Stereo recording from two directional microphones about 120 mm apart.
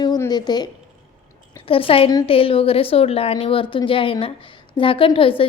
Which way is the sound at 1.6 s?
50° left (ahead or behind).